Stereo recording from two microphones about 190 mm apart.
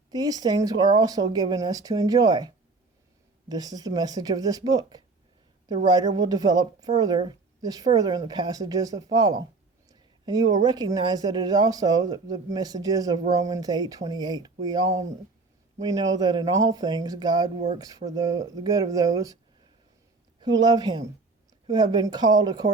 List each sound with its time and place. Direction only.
0.1 s speech: 20° right (ahead or behind)
3.5 s speech: 20° right (ahead or behind)